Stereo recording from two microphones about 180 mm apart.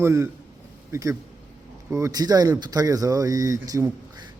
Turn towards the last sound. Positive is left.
turn(degrees=-20)  # may be behind; listen again after turning